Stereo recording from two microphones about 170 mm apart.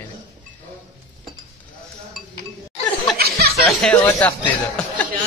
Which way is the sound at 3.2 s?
65° right (ahead or behind).